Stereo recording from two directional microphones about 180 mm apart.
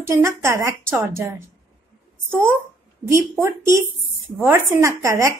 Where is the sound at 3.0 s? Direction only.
15° right (ahead or behind).